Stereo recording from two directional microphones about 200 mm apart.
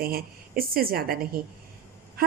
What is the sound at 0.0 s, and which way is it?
A woman's voice, 50° right (ahead or behind).